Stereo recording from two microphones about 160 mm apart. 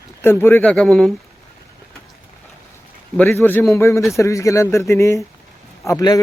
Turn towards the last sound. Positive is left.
turn(degrees=20)  # may be behind; listen again after turning